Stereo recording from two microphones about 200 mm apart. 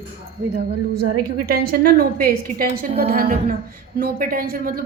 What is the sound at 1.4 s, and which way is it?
A woman's voice, 45° right (ahead or behind).